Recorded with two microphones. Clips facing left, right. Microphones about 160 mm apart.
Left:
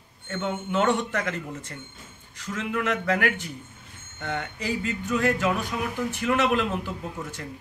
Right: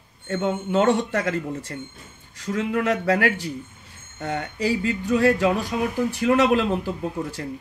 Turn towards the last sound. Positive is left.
turn(degrees=-35)  # may be behind; listen again after turning